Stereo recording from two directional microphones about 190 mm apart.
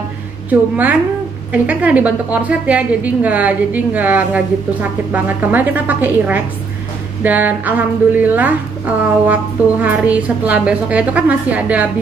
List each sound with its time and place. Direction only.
0.5 s a woman's voice: 10° right (ahead or behind)